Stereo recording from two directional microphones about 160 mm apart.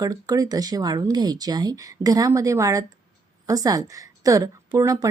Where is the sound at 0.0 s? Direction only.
20° right (ahead or behind).